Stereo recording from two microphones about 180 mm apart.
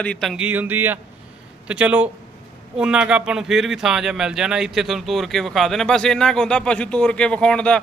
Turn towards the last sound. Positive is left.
turn(degrees=5)  # may be behind; listen again after turning